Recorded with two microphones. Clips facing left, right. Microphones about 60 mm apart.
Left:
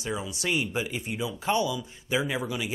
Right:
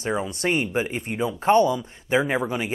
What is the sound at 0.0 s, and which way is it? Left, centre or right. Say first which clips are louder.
Speech: right 6 dB; right.